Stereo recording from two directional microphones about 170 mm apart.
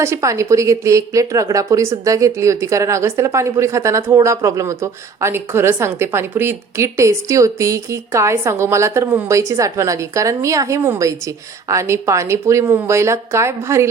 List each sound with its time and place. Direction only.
0.0 s a woman's voice: 15° right (ahead or behind)